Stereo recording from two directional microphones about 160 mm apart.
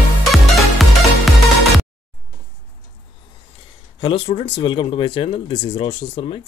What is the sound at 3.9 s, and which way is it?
Speech, 35° left (ahead or behind).